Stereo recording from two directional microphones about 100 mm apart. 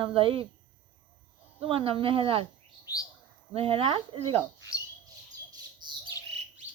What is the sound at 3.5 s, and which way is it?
Speech, 70° right (ahead or behind).